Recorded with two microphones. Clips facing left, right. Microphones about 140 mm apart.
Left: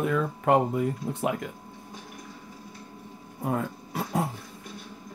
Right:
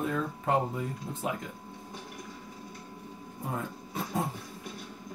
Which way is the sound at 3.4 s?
65° left (ahead or behind).